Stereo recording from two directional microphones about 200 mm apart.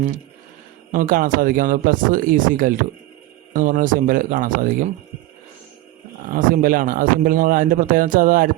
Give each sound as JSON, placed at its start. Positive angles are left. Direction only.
{"t": 0.9, "sound": "speech", "side_deg": -45}
{"t": 6.3, "sound": "speech", "side_deg": -45}